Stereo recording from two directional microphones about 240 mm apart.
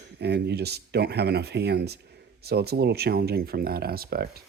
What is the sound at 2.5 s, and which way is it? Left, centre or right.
Speech, right.